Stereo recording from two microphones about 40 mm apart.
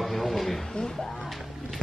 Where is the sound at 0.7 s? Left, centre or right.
Centre.